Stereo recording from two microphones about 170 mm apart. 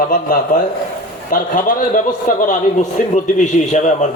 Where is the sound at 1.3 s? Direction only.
50° left (ahead or behind).